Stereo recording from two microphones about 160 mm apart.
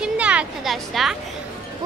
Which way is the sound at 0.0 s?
10° right (ahead or behind).